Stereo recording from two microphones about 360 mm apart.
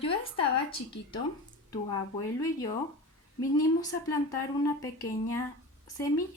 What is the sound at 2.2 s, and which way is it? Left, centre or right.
Speech, centre.